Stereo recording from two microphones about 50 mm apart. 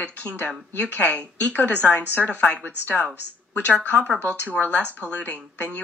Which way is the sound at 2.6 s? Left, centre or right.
Left.